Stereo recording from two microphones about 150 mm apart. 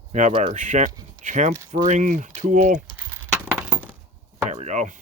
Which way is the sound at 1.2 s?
55° right (ahead or behind).